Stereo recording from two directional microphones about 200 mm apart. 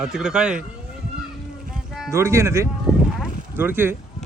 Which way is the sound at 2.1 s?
15° right (ahead or behind).